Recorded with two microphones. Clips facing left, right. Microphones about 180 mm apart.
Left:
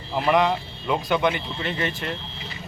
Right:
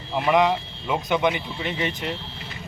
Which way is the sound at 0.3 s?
15° right (ahead or behind).